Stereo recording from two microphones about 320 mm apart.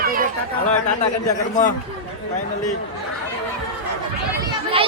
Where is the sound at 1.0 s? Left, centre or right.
Left.